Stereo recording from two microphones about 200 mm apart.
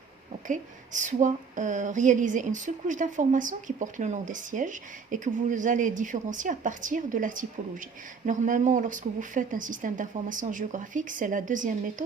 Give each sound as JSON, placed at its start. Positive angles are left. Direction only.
{"t": 0.4, "sound": "speech", "side_deg": -40}